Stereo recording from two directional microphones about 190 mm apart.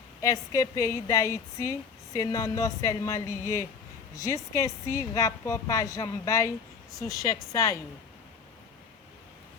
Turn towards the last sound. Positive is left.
turn(degrees=15)  # may be behind; listen again after turning